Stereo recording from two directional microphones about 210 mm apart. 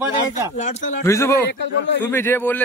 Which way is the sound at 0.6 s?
35° left (ahead or behind).